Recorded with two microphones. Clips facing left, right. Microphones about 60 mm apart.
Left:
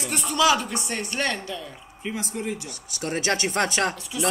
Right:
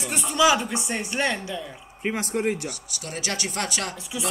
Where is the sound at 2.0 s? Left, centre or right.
Right.